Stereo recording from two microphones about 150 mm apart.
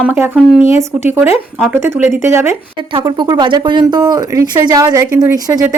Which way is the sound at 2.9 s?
35° right (ahead or behind).